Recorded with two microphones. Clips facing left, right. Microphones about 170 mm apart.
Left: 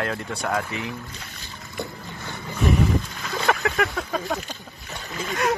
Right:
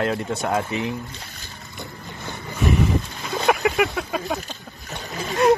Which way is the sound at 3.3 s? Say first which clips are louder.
Right 3 dB; 15° right (ahead or behind).